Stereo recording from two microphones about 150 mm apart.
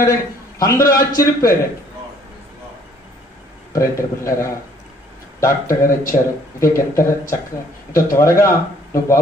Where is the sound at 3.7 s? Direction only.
20° left (ahead or behind).